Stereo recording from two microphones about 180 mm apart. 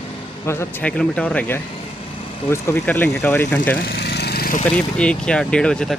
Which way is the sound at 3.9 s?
65° left (ahead or behind).